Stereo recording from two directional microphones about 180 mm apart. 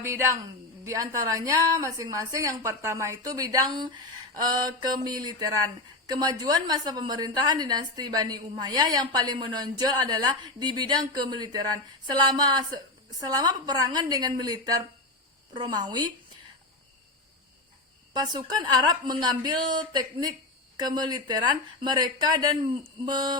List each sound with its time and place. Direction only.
0.0 s a woman's voice: 15° right (ahead or behind)
18.1 s a woman's voice: 25° right (ahead or behind)